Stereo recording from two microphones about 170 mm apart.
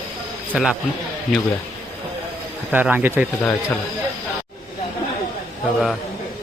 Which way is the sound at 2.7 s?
10° right (ahead or behind).